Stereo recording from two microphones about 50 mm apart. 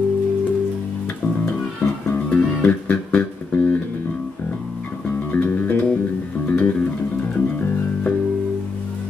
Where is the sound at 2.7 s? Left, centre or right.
Left.